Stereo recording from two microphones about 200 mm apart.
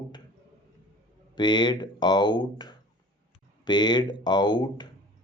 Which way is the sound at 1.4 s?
20° left (ahead or behind).